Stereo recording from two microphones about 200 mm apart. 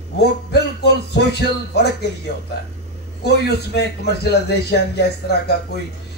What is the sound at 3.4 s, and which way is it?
Speech, 55° left (ahead or behind).